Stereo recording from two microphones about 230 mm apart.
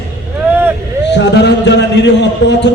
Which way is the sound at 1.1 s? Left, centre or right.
Left.